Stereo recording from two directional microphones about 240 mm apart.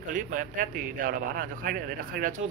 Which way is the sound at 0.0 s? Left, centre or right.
Right.